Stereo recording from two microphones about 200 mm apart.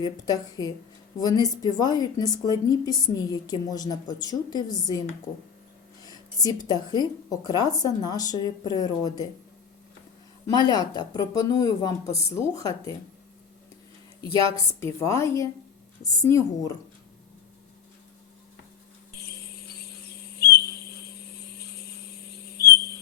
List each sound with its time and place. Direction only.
0.0 s a woman's voice: 20° left (ahead or behind)
6.0 s a woman's voice: 20° left (ahead or behind)
10.4 s speech: 20° left (ahead or behind)
14.6 s speech: 15° left (ahead or behind)
19.8 s a sound: 50° left (ahead or behind)
22.3 s a sound: 50° left (ahead or behind)